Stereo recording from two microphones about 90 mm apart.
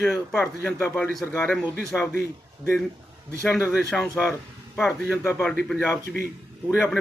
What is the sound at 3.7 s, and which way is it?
Speech, 5° left (ahead or behind).